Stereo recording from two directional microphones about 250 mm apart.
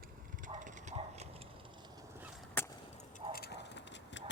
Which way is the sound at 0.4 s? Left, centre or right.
Right.